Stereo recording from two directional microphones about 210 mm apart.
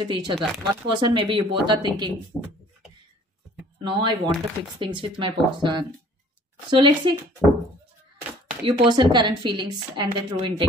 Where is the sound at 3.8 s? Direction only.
25° right (ahead or behind).